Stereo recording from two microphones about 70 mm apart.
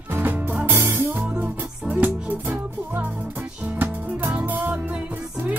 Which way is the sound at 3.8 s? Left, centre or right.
Right.